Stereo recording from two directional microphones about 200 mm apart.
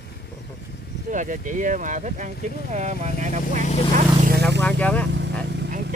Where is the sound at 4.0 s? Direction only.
45° right (ahead or behind).